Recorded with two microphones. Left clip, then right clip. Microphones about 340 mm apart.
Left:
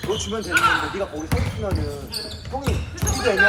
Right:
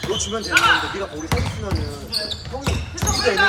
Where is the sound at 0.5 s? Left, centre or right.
Centre.